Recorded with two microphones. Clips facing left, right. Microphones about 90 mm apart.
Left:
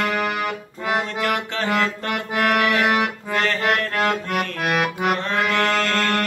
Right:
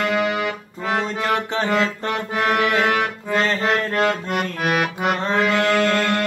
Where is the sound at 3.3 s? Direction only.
20° right (ahead or behind).